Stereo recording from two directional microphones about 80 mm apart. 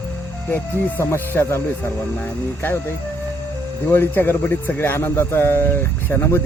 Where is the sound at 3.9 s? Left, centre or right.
Left.